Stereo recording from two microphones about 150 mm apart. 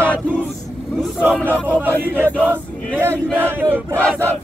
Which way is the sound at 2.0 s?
10° right (ahead or behind).